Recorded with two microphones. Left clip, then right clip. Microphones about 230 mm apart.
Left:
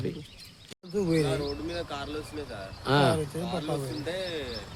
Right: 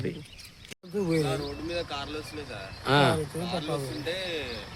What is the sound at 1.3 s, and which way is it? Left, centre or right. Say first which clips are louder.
Speech: left 1 dB; left.